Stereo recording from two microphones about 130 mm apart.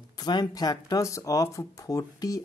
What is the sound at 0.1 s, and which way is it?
Speech, 30° left (ahead or behind).